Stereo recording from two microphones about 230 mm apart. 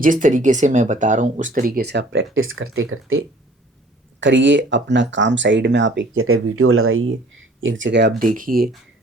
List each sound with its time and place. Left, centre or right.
0.0 s speech: right
8.2 s speech: right